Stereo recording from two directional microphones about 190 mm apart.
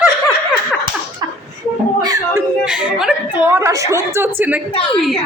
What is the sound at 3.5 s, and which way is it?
A woman's voice, 15° right (ahead or behind).